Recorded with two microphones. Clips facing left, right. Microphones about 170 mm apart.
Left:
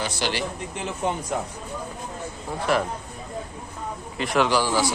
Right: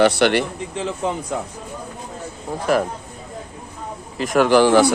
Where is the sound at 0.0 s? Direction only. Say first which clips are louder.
Right 12 dB; 65° right (ahead or behind); by 1.1 s 90° right.